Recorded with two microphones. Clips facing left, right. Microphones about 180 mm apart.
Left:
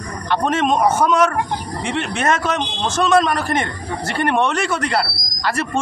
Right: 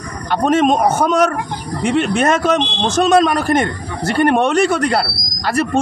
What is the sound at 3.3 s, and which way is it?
Speech, 40° right (ahead or behind).